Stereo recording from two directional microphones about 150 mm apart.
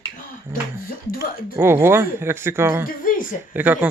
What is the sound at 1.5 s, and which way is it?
Speech, 15° right (ahead or behind).